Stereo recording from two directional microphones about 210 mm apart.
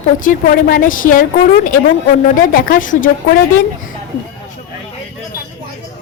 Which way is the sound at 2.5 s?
45° left (ahead or behind).